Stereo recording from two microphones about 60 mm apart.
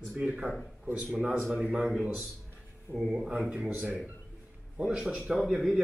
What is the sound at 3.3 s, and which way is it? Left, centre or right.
Speech, centre.